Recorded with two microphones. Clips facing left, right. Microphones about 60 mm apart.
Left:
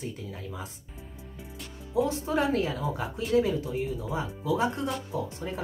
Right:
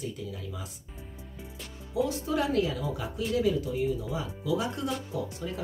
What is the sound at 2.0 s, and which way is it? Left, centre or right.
A woman's voice, left.